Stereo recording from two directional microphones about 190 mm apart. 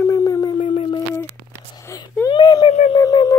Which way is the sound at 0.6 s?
30° left (ahead or behind).